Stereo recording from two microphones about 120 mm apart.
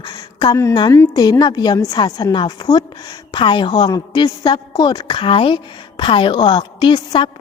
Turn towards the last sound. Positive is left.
turn(degrees=40)  # may be behind; listen again after turning